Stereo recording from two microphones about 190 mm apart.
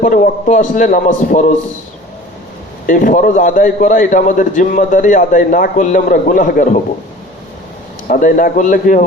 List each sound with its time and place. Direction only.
0.0 s a man's voice: 45° left (ahead or behind)
2.8 s a man's voice: 45° left (ahead or behind)
8.0 s a man's voice: 45° left (ahead or behind)